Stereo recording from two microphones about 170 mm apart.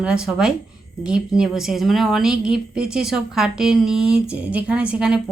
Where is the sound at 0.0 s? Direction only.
5° right (ahead or behind).